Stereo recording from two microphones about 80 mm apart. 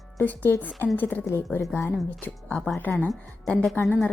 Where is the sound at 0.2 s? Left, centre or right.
Left.